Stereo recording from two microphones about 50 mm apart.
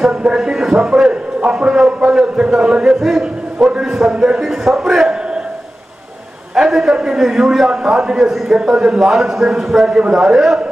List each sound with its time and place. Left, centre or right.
0.2 s a man's voice: centre
1.4 s a sound: centre
4.4 s a man's voice: centre
6.5 s a man's voice: centre